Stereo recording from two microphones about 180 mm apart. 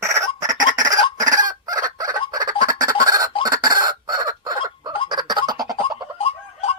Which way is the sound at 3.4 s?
20° right (ahead or behind).